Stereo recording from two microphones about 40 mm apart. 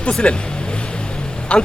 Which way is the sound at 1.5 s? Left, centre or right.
Left.